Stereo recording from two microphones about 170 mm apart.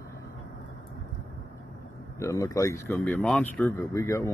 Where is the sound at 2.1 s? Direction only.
20° left (ahead or behind).